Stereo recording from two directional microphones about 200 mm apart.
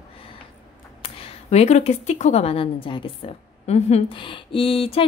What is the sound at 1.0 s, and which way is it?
A woman's voice, 35° left (ahead or behind).